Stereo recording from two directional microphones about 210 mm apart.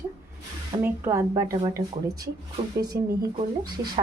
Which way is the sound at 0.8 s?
10° right (ahead or behind).